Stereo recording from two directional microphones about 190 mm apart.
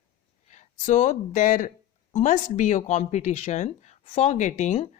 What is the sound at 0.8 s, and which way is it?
Speech, 40° left (ahead or behind).